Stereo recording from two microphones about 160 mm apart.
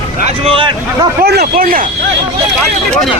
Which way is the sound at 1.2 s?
90° right.